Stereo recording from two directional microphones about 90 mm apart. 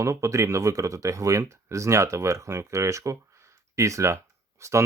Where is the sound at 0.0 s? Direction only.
35° right (ahead or behind).